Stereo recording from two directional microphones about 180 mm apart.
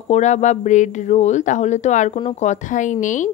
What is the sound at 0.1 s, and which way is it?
Speech, 40° left (ahead or behind).